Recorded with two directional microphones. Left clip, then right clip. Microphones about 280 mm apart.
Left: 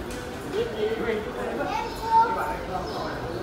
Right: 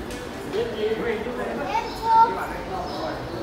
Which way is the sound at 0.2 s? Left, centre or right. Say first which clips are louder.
Right 2 dB; centre.